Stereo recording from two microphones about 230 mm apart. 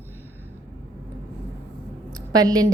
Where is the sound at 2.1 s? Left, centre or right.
Centre.